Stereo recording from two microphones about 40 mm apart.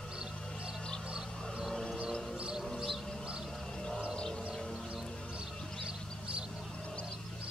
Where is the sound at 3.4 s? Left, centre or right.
Centre.